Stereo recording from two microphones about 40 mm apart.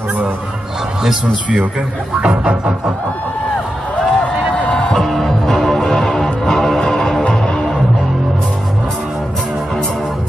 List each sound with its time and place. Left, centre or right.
2.1 s music: right
3.9 s a sound: left
5.0 s music: centre